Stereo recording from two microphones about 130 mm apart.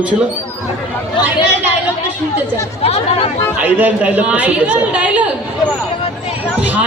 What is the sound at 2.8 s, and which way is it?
Chatter, 50° left (ahead or behind).